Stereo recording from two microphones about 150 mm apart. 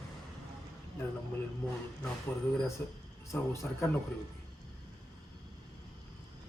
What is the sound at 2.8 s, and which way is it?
A man's voice, 15° left (ahead or behind).